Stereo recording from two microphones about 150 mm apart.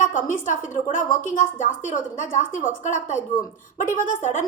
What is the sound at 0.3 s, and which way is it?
A woman's voice, 60° left (ahead or behind).